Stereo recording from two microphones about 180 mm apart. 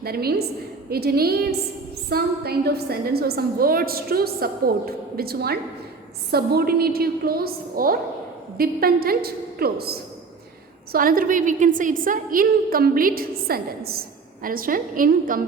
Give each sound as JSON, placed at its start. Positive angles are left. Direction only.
{"t": 0.0, "sound": "a woman's voice", "side_deg": -60}